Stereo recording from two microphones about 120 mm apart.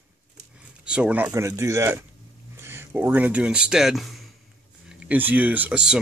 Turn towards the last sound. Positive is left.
turn(degrees=-5)  # may be behind; listen again after turning